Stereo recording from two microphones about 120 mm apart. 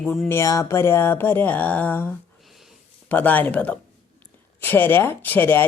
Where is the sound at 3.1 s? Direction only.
15° left (ahead or behind).